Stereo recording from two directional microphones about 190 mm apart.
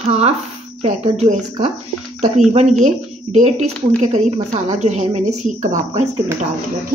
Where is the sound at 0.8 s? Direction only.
35° right (ahead or behind).